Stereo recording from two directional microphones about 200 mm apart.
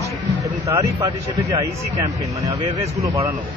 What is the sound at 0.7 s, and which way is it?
Speech, 15° right (ahead or behind).